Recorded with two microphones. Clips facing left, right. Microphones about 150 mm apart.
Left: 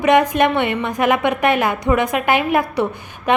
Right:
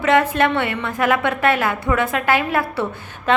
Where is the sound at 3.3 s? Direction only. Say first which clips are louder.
Left 1 dB; 15° left (ahead or behind).